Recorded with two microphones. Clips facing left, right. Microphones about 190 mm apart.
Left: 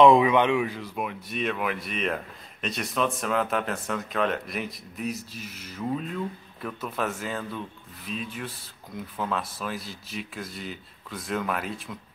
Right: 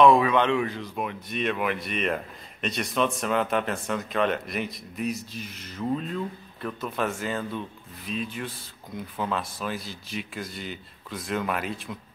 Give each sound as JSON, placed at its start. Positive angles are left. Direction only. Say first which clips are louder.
{"t": 0.0, "sound": "speech", "louder": "left 1 dB", "side_deg": 20}